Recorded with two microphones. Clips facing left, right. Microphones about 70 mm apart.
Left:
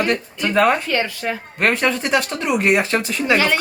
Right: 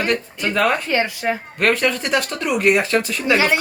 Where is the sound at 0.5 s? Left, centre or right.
Left.